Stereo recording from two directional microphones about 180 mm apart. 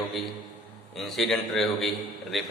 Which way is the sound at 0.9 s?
Centre (ahead or behind).